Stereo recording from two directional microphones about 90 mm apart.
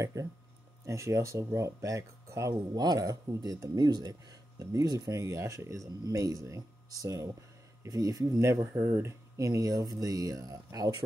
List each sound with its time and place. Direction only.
0.0 s speech: 35° right (ahead or behind)
2.7 s speech: 45° right (ahead or behind)